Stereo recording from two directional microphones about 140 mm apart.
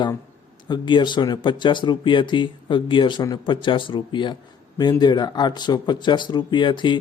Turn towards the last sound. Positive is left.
turn(degrees=35)  # may be behind; listen again after turning